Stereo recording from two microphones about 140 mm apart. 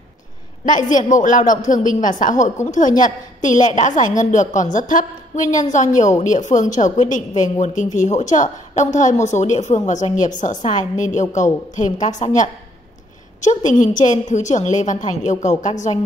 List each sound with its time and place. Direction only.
0.7 s a woman's voice: 65° left (ahead or behind)
13.4 s a woman's voice: 60° left (ahead or behind)